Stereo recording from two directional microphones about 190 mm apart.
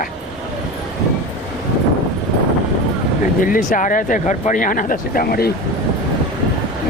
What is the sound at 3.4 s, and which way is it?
Speech, 45° left (ahead or behind).